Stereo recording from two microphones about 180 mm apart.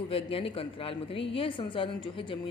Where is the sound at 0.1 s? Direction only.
30° left (ahead or behind).